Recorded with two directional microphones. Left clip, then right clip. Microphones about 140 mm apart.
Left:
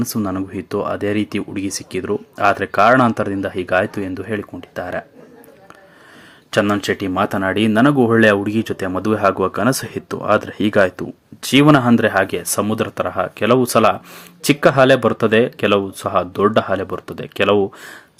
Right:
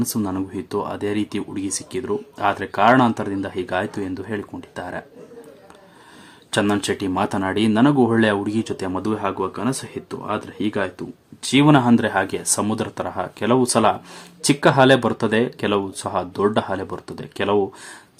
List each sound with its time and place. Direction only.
0.0 s speech: 15° left (ahead or behind)
6.5 s speech: 10° left (ahead or behind); by 11.0 s 35° left (ahead or behind)
11.4 s speech: 20° left (ahead or behind)